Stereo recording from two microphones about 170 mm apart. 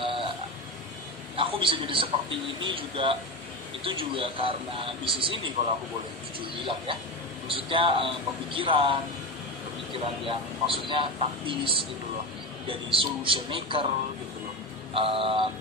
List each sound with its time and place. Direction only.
0.0 s a sound: 30° right (ahead or behind)
1.3 s a man's voice: 30° right (ahead or behind)
15.0 s a man's voice: 35° right (ahead or behind)